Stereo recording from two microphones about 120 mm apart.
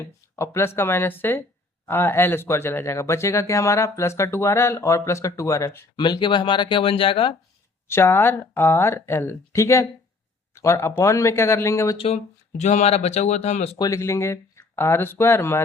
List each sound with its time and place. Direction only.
0.0 s speech: 20° left (ahead or behind)
6.0 s speech: 40° left (ahead or behind)
7.9 s speech: 20° left (ahead or behind)
11.9 s speech: 55° left (ahead or behind)
12.5 s speech: 80° left
13.7 s speech: 30° left (ahead or behind)